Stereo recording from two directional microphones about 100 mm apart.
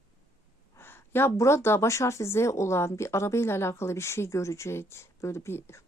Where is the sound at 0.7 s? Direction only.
25° left (ahead or behind).